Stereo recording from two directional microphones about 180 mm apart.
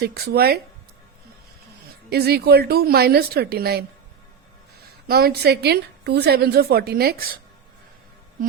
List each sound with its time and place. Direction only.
0.0 s a woman's voice: 60° right (ahead or behind)
2.0 s a woman's voice: 60° right (ahead or behind)
5.0 s a woman's voice: 60° right (ahead or behind)